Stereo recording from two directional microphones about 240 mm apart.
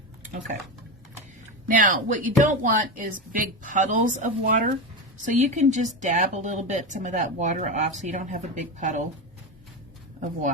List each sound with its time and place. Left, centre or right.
1.6 s a woman's voice: right